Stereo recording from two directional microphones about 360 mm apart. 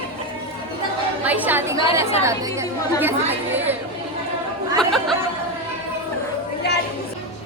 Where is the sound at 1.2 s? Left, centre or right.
Centre.